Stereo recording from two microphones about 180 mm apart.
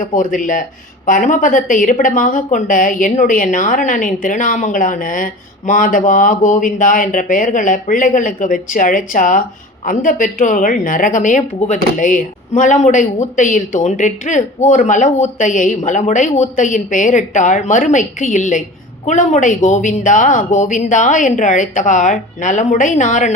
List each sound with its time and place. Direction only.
0.0 s speech: 45° left (ahead or behind)